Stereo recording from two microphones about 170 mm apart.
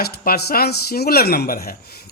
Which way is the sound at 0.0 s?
65° left (ahead or behind).